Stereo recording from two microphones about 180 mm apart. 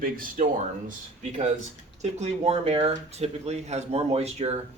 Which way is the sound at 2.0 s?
35° right (ahead or behind).